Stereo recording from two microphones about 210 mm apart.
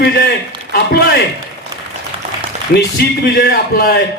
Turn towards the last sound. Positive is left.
turn(degrees=45)  # may be behind; listen again after turning